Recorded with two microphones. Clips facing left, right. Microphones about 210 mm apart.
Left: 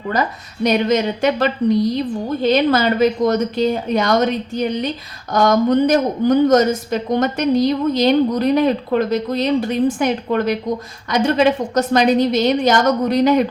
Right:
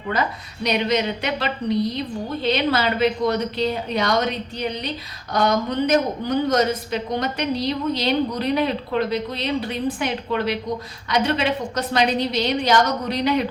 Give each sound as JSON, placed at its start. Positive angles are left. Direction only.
{"t": 0.1, "sound": "speech", "side_deg": 45}